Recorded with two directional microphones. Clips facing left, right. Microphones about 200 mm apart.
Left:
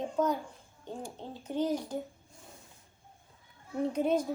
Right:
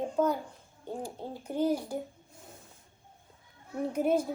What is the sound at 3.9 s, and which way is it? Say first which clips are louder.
Speech: right 2 dB; 10° right (ahead or behind).